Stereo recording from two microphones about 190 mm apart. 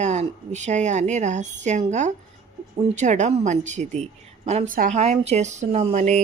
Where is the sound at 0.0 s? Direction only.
35° right (ahead or behind).